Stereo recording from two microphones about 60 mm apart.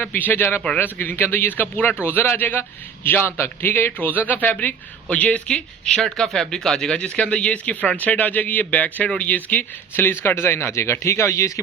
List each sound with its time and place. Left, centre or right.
0.0 s a man's voice: left